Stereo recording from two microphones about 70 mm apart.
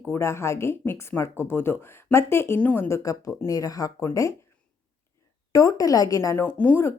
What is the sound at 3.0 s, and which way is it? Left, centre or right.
Speech, left.